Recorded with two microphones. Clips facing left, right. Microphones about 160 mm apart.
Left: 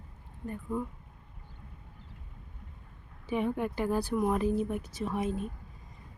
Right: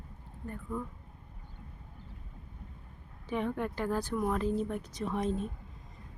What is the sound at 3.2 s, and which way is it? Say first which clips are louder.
Speech: left 2 dB; 10° left (ahead or behind).